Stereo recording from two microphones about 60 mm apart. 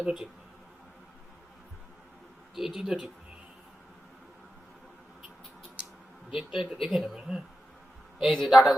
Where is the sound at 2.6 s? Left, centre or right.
Centre.